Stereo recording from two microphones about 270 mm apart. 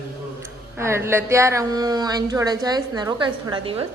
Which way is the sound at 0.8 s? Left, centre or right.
Centre.